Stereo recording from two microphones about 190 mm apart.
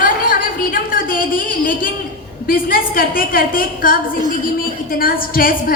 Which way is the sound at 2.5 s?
50° left (ahead or behind).